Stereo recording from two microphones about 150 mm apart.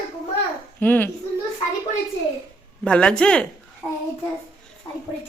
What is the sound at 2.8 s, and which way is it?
Speech, 5° left (ahead or behind).